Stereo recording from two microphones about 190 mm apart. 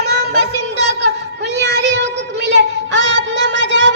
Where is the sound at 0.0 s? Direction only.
60° right (ahead or behind).